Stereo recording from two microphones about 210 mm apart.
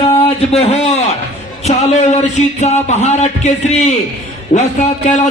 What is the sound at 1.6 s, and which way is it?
A man's voice, 30° left (ahead or behind).